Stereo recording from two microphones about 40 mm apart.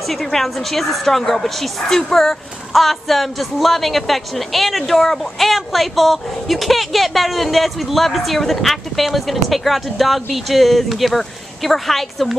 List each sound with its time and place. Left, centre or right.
0.1 s a woman's voice: centre
2.7 s a woman's voice: centre